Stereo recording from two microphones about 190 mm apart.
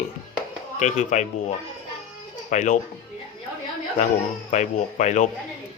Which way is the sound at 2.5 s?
40° left (ahead or behind).